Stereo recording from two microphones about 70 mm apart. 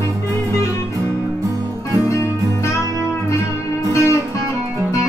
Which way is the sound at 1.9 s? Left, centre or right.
Left.